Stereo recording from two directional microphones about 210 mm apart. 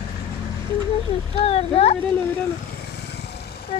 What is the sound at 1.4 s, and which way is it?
Boat, 30° left (ahead or behind).